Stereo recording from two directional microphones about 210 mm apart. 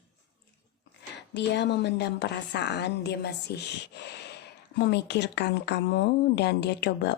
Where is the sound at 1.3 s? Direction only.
55° left (ahead or behind).